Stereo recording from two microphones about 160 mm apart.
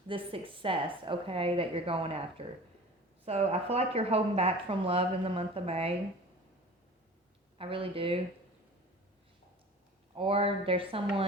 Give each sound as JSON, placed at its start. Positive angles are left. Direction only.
{"t": 0.1, "sound": "speech", "side_deg": -35}
{"t": 7.6, "sound": "speech", "side_deg": -35}
{"t": 10.2, "sound": "speech", "side_deg": -35}